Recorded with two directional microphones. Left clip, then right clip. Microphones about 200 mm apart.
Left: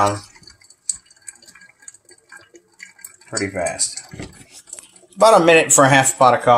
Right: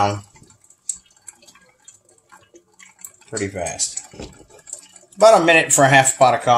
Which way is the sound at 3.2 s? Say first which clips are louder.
Left 3 dB; 5° left (ahead or behind).